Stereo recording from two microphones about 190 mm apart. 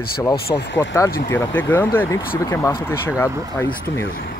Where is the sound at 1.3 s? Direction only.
15° left (ahead or behind).